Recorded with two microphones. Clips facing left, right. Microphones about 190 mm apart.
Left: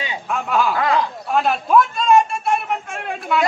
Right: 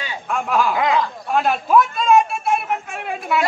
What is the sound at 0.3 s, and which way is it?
Speech, centre (ahead or behind).